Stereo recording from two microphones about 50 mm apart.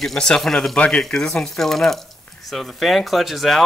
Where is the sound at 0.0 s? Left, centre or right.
Centre.